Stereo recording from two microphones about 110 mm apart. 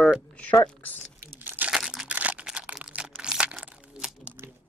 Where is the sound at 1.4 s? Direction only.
15° right (ahead or behind).